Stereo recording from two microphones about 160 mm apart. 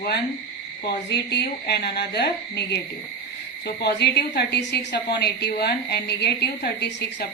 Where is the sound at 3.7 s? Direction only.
90° left.